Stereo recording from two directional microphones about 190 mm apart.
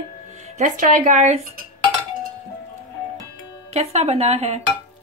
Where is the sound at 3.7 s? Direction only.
35° right (ahead or behind).